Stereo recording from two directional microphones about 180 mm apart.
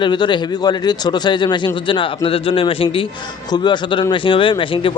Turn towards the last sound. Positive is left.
turn(degrees=30)  # may be behind; listen again after turning